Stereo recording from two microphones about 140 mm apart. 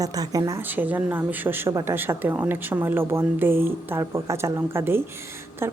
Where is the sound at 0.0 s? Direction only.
25° right (ahead or behind).